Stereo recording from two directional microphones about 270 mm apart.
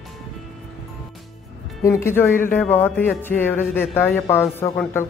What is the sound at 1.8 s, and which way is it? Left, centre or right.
Speech, centre.